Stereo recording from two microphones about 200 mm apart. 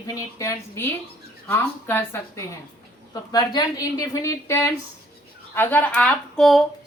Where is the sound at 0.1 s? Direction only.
15° left (ahead or behind).